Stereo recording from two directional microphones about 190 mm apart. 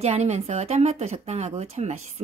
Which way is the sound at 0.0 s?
35° right (ahead or behind).